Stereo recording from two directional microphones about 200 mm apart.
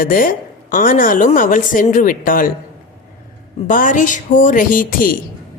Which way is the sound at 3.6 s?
40° left (ahead or behind).